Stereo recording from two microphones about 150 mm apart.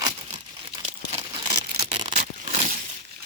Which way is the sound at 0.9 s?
40° right (ahead or behind).